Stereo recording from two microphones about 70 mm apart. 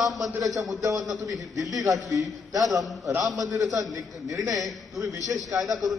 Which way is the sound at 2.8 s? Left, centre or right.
Centre.